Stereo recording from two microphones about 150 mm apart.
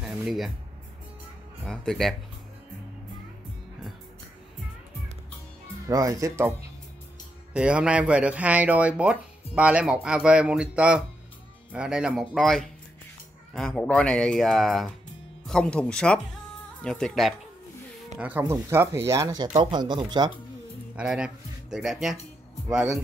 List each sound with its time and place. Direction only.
0.0 s music: centre (ahead or behind)
1.6 s speech: centre (ahead or behind)
5.9 s speech: 25° right (ahead or behind)
7.5 s speech: 5° right (ahead or behind)
18.4 s speech: 20° right (ahead or behind)
20.9 s speech: 5° right (ahead or behind)